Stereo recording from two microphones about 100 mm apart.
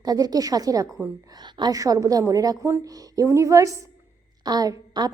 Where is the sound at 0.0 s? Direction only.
40° right (ahead or behind).